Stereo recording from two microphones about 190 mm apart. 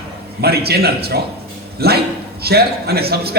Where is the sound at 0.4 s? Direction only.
55° right (ahead or behind).